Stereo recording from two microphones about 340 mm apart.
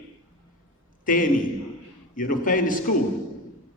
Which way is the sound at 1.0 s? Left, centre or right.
Left.